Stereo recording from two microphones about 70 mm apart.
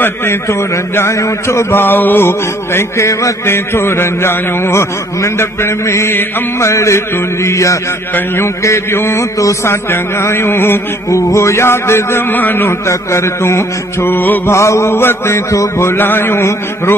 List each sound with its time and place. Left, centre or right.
0.0 s a man's voice: left
3.5 s a man's voice: left
6.6 s mantra: left
8.6 s a man's voice: left
11.1 s a man's voice: left
12.8 s a man's voice: left
14.5 s a man's voice: left